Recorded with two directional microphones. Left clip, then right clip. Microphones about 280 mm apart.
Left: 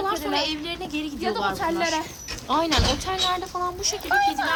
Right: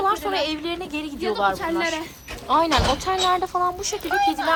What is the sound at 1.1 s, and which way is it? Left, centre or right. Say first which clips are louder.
Speech: right 4 dB; left.